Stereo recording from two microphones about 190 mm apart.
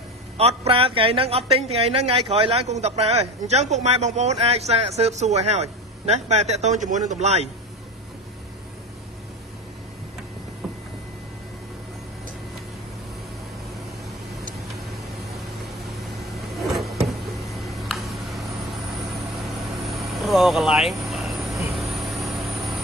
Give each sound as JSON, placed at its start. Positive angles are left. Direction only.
{"t": 0.4, "sound": "speech", "side_deg": -30}
{"t": 16.0, "sound": "vehicle", "side_deg": 0}